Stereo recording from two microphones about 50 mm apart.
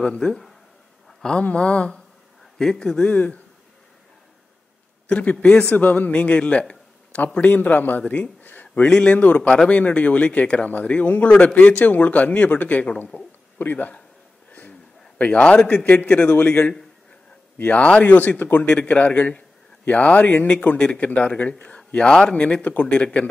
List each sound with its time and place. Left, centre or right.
0.0 s speech: centre
1.4 s speech: left
2.6 s speech: centre
5.0 s speech: left
5.8 s a man's voice: left
8.5 s speech: left
8.8 s a man's voice: centre; by 13.9 s left
14.5 s a sound: left
15.9 s a man's voice: left